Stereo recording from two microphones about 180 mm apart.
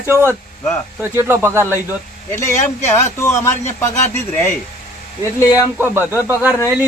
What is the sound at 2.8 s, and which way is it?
Speech, 15° left (ahead or behind).